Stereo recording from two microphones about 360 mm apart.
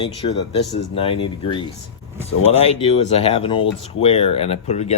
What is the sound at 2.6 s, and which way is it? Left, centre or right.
Speech, centre.